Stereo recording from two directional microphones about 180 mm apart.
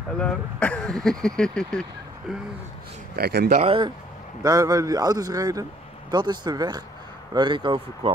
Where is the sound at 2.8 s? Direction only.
60° right (ahead or behind).